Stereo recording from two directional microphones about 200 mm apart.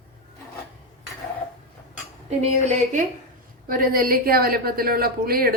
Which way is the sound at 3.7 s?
45° right (ahead or behind).